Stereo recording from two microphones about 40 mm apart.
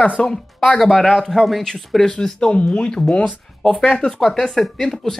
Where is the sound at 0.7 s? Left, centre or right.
Centre.